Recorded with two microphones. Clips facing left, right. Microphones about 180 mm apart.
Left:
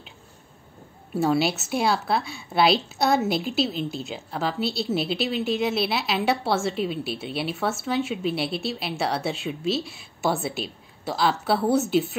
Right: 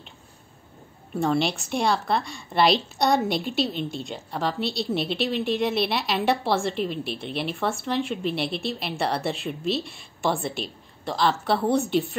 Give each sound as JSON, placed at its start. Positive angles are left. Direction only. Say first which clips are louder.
{"t": 1.1, "sound": "a woman's voice", "louder": "left 1 dB", "side_deg": 5}